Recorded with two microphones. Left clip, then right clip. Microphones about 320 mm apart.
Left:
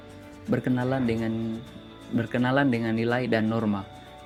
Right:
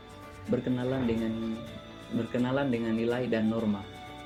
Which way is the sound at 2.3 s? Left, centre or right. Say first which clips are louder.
Left 6 dB; left.